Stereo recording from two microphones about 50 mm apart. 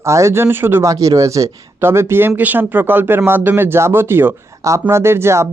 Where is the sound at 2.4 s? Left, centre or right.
Right.